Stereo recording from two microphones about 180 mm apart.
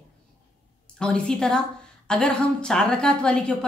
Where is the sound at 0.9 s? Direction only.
5° left (ahead or behind).